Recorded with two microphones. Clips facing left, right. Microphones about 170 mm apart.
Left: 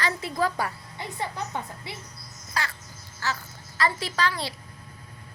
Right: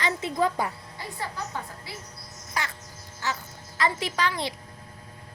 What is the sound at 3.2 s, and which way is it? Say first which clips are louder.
A child's voice: even; 15° right (ahead or behind).